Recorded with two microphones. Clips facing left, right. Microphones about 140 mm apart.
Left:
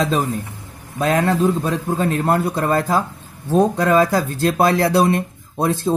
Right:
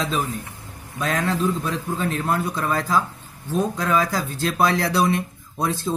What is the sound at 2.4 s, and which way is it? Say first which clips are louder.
Speech: left 5 dB; 60° left (ahead or behind).